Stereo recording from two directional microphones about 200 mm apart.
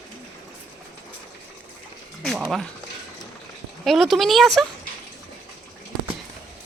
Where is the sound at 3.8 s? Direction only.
Centre (ahead or behind).